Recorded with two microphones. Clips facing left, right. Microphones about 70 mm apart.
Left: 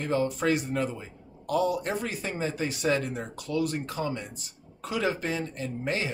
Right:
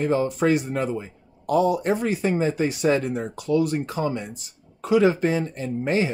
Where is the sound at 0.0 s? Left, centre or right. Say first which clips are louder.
Right 5 dB; right.